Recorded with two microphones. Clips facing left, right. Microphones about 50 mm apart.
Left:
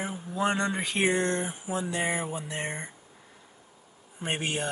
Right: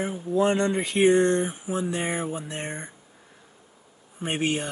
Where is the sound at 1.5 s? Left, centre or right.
Right.